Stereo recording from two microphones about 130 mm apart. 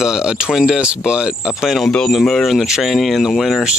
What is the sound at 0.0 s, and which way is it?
Speech, 5° right (ahead or behind).